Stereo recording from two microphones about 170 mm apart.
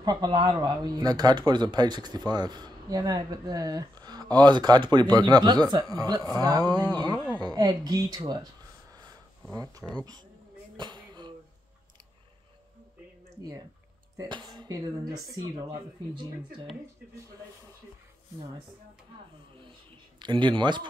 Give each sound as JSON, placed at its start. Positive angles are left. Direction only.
{"t": 0.0, "sound": "speech", "side_deg": -25}
{"t": 8.9, "sound": "sniff", "side_deg": -20}
{"t": 10.8, "sound": "music", "side_deg": -25}
{"t": 14.1, "sound": "speech", "side_deg": -25}
{"t": 20.2, "sound": "speech", "side_deg": -25}